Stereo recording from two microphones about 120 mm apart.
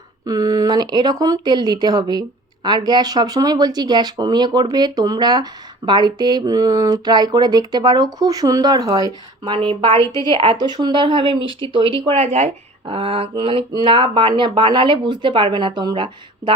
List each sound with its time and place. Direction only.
0.3 s speech: 30° right (ahead or behind)
9.4 s speech: 45° right (ahead or behind)
12.8 s speech: 50° right (ahead or behind)